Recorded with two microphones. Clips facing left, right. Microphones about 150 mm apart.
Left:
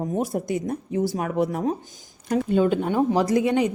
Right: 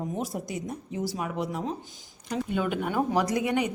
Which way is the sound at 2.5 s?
30° left (ahead or behind).